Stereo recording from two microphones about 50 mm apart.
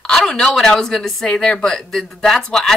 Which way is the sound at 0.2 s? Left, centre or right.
Centre.